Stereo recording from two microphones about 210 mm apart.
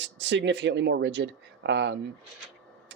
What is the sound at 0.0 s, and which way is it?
Speech, 55° right (ahead or behind).